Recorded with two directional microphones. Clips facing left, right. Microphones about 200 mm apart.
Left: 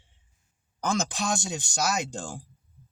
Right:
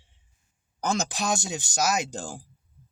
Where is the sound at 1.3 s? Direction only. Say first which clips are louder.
Right 1 dB; 5° right (ahead or behind).